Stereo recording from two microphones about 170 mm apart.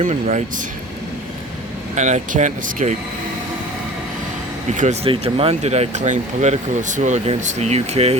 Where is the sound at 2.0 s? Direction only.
45° right (ahead or behind).